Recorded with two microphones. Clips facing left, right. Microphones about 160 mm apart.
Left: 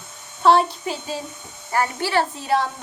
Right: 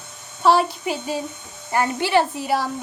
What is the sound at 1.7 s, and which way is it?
Speech, 20° right (ahead or behind).